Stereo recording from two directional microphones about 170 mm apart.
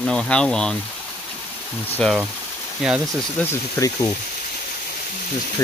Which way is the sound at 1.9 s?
5° left (ahead or behind).